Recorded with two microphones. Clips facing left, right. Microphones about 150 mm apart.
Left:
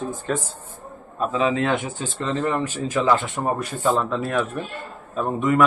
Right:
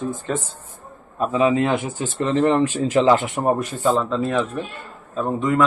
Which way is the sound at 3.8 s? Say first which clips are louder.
Even; 10° left (ahead or behind).